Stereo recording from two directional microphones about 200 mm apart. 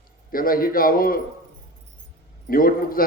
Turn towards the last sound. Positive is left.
turn(degrees=45)  # may be behind; listen again after turning